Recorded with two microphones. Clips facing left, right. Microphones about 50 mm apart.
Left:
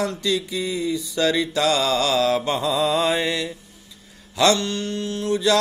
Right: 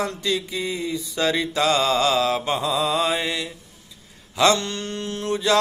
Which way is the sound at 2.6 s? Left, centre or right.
Centre.